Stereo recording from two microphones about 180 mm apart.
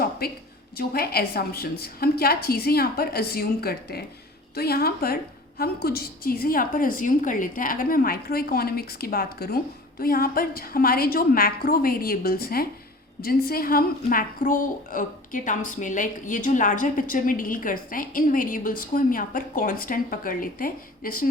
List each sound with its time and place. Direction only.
0.8 s a woman's voice: 60° left (ahead or behind)